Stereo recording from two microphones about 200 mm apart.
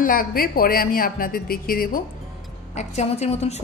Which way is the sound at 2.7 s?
35° left (ahead or behind).